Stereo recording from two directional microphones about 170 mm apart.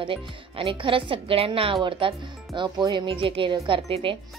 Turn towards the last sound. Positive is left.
turn(degrees=-30)  # may be behind; listen again after turning